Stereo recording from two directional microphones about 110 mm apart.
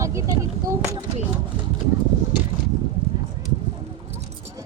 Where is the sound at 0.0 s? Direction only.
30° right (ahead or behind).